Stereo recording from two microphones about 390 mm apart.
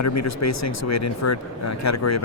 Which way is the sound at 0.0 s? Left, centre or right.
Left.